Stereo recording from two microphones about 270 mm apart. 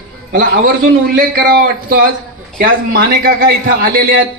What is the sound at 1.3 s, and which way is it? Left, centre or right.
A man's voice, right.